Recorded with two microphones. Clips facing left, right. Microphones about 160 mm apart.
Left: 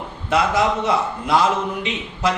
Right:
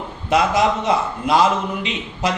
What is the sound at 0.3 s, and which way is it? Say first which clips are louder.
A man's voice: right 2 dB; 20° right (ahead or behind).